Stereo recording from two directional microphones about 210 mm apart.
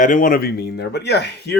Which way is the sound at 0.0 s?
40° left (ahead or behind).